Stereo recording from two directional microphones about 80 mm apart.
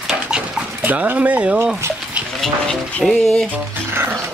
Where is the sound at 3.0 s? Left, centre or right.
Centre.